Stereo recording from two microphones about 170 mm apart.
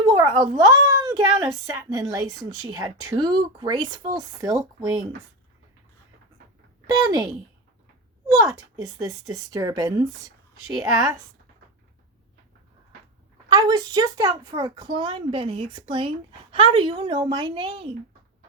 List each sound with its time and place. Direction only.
0.0 s a child's voice: 25° right (ahead or behind)
6.9 s speech: 25° right (ahead or behind)
8.3 s speech: 20° right (ahead or behind)
13.5 s speech: 25° right (ahead or behind)